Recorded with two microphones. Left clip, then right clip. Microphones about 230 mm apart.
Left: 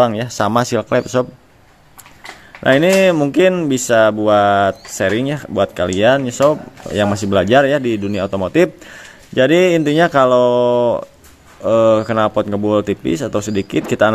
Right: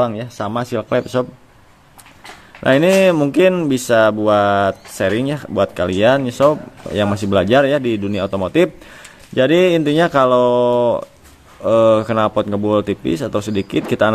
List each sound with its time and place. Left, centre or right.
0.0 s speech: centre
0.8 s speech: centre
2.6 s speech: centre